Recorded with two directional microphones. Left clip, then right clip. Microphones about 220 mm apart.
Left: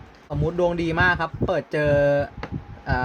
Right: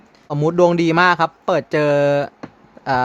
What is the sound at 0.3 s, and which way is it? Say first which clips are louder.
Speech: right 8 dB; 40° right (ahead or behind).